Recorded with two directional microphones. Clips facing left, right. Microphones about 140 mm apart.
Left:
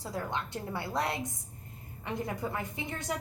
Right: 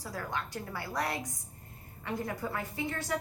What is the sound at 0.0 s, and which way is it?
A woman's voice, 25° left (ahead or behind).